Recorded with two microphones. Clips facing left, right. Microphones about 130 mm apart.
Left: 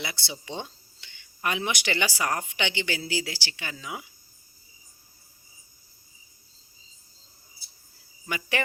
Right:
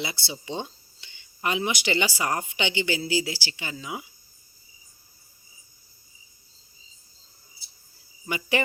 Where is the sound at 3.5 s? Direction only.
15° right (ahead or behind).